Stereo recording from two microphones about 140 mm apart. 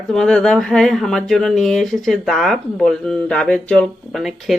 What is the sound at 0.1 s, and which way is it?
Speech, 5° left (ahead or behind).